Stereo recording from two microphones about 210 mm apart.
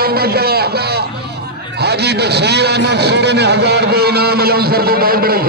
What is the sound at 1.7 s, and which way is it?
A man's voice, 50° right (ahead or behind).